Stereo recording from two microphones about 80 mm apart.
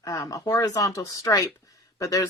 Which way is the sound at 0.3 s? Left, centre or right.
Left.